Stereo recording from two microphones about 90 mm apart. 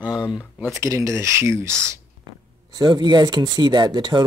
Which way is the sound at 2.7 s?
55° right (ahead or behind).